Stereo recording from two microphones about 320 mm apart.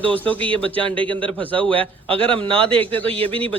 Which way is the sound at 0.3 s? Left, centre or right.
Centre.